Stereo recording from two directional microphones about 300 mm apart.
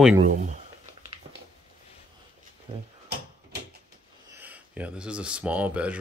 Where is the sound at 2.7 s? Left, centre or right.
Centre.